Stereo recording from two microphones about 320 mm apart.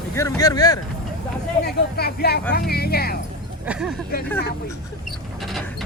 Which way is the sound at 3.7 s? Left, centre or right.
Centre.